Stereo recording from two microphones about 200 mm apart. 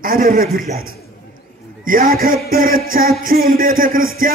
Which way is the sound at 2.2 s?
45° right (ahead or behind).